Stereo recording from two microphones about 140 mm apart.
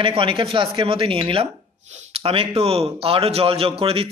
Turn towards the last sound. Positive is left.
turn(degrees=-45)  # may be behind; listen again after turning